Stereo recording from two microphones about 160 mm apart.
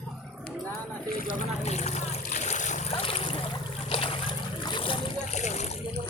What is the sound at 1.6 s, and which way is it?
Boat, 45° left (ahead or behind).